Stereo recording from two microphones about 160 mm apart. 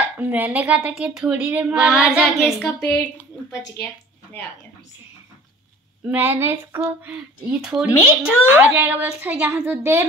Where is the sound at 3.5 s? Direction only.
25° left (ahead or behind).